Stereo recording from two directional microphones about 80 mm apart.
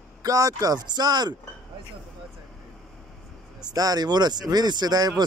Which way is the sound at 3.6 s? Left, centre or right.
Right.